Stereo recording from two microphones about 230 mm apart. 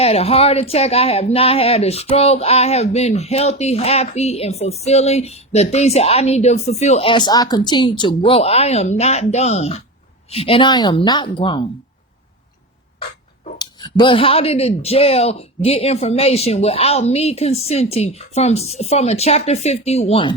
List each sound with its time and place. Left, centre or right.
0.0 s speech: left
13.6 s speech: centre